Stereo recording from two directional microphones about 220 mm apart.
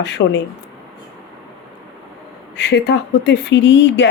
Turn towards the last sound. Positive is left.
turn(degrees=55)  # may be behind; listen again after turning